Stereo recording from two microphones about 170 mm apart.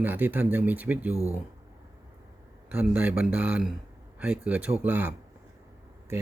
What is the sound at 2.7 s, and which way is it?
Speech, 10° right (ahead or behind).